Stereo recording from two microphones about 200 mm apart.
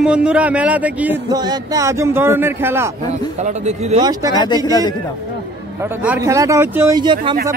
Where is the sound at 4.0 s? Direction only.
20° right (ahead or behind).